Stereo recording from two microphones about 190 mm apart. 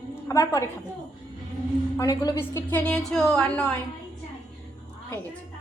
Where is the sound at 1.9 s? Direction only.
15° left (ahead or behind).